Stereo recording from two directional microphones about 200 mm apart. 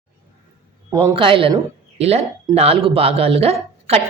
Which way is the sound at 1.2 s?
25° right (ahead or behind).